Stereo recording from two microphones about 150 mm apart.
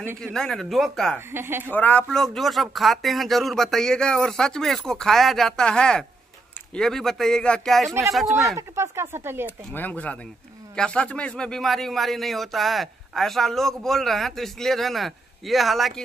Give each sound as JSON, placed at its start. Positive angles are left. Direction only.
{"t": 0.2, "sound": "speech", "side_deg": 5}
{"t": 1.3, "sound": "speech", "side_deg": -15}
{"t": 1.7, "sound": "speech", "side_deg": 10}
{"t": 8.5, "sound": "speech", "side_deg": -20}
{"t": 9.7, "sound": "speech", "side_deg": 10}